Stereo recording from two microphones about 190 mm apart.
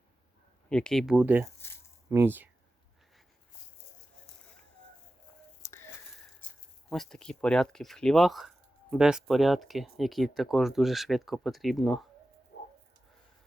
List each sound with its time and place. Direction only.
0.7 s speech: 5° left (ahead or behind)
5.6 s a sound: 15° left (ahead or behind)
6.9 s speech: 5° left (ahead or behind)